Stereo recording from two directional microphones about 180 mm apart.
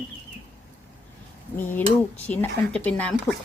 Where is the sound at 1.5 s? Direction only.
10° left (ahead or behind).